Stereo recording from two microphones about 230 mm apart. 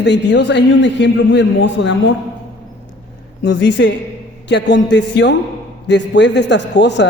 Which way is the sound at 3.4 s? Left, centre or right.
Left.